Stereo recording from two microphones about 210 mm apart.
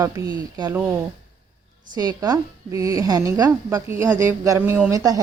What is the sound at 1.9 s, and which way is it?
A woman's voice, 20° right (ahead or behind).